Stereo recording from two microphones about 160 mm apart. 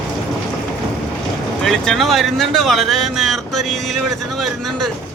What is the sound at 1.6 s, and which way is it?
Speech, 5° left (ahead or behind).